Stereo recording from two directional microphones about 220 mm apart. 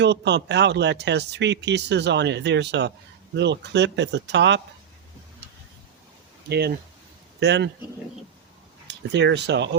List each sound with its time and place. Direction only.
0.0 s speech: 50° right (ahead or behind)
6.5 s speech: 45° right (ahead or behind)
8.9 s speech: 50° right (ahead or behind)